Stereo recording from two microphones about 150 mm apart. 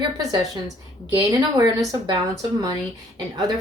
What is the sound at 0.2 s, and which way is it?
Speech, 25° right (ahead or behind).